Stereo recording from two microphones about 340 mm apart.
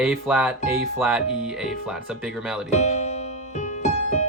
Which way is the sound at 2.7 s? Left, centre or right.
Centre.